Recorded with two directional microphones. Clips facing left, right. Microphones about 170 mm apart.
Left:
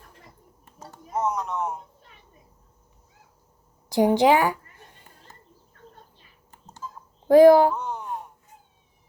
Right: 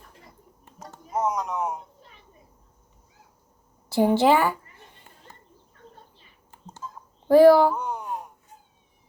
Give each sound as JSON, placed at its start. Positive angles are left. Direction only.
{"t": 0.8, "sound": "speech", "side_deg": -10}
{"t": 3.8, "sound": "a woman's voice", "side_deg": 15}
{"t": 7.3, "sound": "speech", "side_deg": 15}
{"t": 7.7, "sound": "a sound", "side_deg": -10}